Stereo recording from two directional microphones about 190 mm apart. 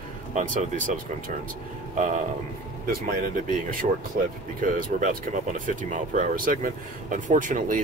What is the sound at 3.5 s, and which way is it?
Speech, 45° right (ahead or behind).